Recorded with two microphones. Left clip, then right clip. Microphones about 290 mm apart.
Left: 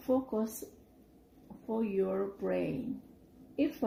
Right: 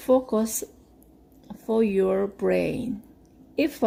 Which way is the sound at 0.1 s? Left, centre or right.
Right.